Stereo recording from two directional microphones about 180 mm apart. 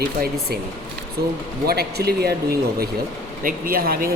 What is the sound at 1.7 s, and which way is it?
Speech, 60° right (ahead or behind).